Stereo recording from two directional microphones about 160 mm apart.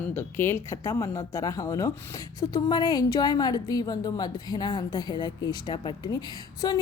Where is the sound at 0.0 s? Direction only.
15° left (ahead or behind).